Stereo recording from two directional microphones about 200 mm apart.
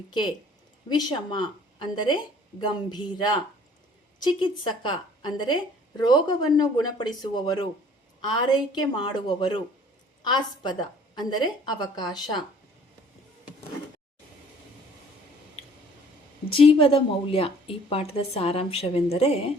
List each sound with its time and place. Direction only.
0.9 s speech: 20° left (ahead or behind)
16.5 s speech: 25° left (ahead or behind)